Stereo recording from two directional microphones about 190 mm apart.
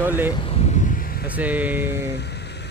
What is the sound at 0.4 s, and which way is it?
Vehicle, 30° left (ahead or behind).